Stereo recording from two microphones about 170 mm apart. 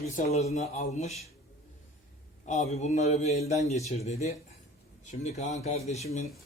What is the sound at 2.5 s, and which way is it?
A man's voice, 40° left (ahead or behind).